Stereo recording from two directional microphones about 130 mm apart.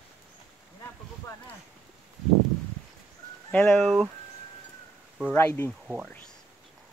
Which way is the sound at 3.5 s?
10° left (ahead or behind).